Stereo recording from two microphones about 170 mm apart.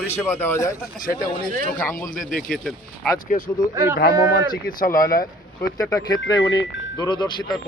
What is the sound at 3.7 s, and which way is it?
Speech, 15° right (ahead or behind).